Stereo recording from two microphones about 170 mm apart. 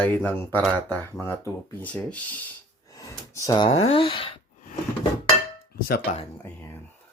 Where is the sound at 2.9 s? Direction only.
20° left (ahead or behind).